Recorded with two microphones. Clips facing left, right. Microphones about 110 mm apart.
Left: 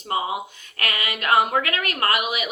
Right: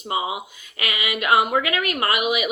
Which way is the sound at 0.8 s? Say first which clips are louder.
Right 1 dB; 40° left (ahead or behind).